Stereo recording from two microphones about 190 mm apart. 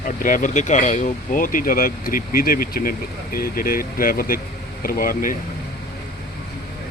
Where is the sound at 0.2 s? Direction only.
45° left (ahead or behind).